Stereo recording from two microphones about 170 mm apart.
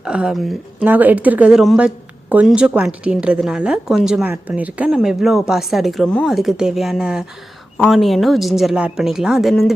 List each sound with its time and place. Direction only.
0.0 s a woman's voice: 5° right (ahead or behind)